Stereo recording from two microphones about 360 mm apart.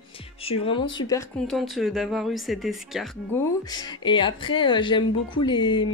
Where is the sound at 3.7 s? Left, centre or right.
Centre.